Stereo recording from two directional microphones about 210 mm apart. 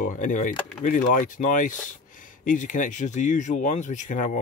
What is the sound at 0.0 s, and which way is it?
Speech, 40° left (ahead or behind).